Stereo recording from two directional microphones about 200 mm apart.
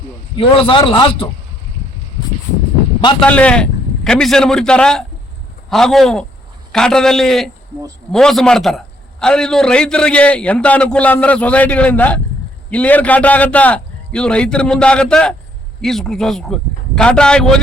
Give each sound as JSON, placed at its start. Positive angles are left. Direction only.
{"t": 0.3, "sound": "a man's voice", "side_deg": 25}
{"t": 3.2, "sound": "a man's voice", "side_deg": 5}